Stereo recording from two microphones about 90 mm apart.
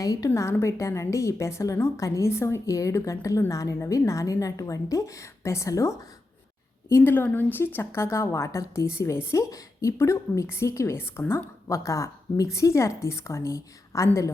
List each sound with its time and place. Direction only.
0.0 s a woman's voice: 45° left (ahead or behind)
0.3 s a woman's voice: 30° left (ahead or behind)
6.8 s a woman's voice: 25° left (ahead or behind)